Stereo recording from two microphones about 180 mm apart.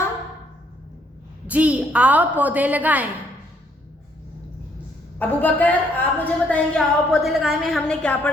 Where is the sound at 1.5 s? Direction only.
10° right (ahead or behind).